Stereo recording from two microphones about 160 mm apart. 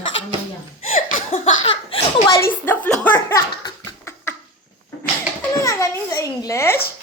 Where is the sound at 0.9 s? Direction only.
50° left (ahead or behind).